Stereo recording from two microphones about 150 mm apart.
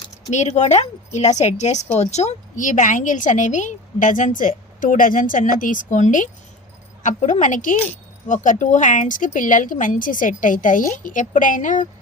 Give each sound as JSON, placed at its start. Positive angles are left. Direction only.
{"t": 0.3, "sound": "a woman's voice", "side_deg": 50}